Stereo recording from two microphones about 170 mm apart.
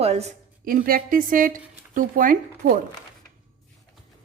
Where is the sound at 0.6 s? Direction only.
55° right (ahead or behind).